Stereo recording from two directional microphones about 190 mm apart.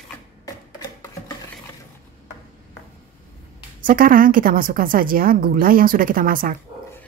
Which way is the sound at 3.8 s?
45° right (ahead or behind).